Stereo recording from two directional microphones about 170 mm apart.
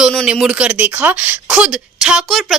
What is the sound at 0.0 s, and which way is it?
Speech, 5° left (ahead or behind).